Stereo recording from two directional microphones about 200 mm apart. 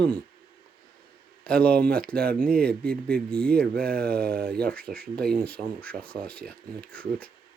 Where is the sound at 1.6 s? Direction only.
50° right (ahead or behind).